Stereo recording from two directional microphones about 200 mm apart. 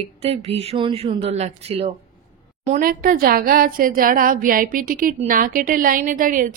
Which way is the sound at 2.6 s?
40° right (ahead or behind).